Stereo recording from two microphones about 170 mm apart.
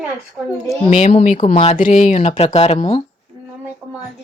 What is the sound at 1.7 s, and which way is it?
Speech, 50° left (ahead or behind).